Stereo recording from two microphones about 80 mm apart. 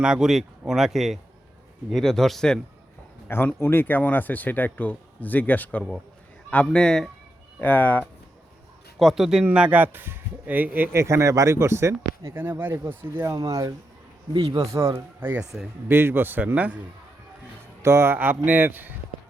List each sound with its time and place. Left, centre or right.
0.0 s speech: centre
3.2 s speech: left
6.7 s a man's voice: centre
7.6 s speech: left
9.0 s speech: centre
9.4 s speech: centre; by 12.4 s right
12.4 s a man's voice: right
13.3 s speech: right
14.9 s a man's voice: right
17.8 s a man's voice: right